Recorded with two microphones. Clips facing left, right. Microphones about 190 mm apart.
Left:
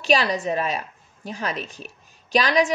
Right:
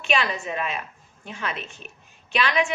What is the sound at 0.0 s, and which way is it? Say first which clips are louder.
A woman's voice: left 5 dB; 35° left (ahead or behind).